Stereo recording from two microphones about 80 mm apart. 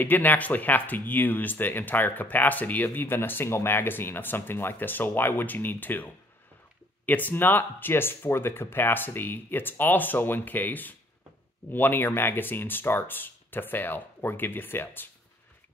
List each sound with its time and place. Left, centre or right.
0.0 s speech: left